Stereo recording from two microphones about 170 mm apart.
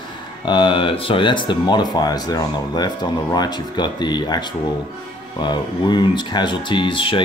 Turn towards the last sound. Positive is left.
turn(degrees=30)  # may be behind; listen again after turning